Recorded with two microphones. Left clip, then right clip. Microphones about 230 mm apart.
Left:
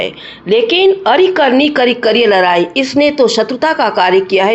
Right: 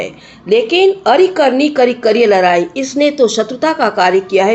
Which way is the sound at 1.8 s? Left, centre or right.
Centre.